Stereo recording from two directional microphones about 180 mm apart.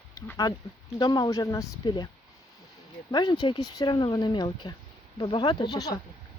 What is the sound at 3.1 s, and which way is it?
Speech, 25° left (ahead or behind).